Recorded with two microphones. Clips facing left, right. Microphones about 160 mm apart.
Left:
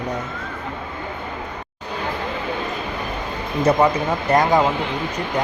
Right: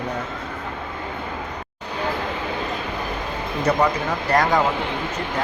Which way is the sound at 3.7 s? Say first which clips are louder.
Left 3 dB; 25° left (ahead or behind).